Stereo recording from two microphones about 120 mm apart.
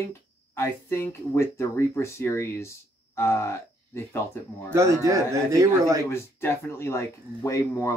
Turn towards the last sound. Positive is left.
turn(degrees=25)  # may be behind; listen again after turning